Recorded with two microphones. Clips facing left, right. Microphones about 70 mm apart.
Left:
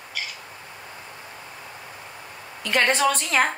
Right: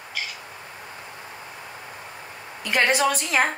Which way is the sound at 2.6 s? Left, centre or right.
Centre.